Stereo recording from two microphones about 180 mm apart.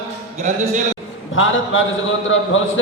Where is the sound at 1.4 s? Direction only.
90° left.